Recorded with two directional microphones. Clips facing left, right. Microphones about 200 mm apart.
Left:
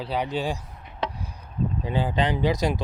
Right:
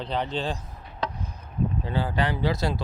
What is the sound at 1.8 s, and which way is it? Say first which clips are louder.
Speech: left 4 dB; 15° left (ahead or behind).